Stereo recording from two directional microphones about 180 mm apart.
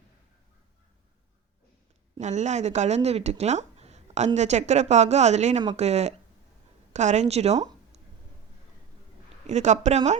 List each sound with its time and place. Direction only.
2.1 s a woman's voice: 40° right (ahead or behind)
9.5 s a woman's voice: 40° right (ahead or behind)